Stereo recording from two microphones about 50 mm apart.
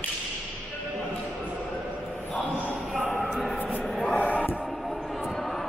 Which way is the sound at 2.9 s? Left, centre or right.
Centre.